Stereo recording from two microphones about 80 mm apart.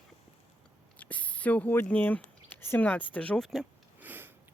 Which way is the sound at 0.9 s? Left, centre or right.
Centre.